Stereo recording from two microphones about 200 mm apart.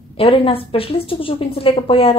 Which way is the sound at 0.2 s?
30° left (ahead or behind).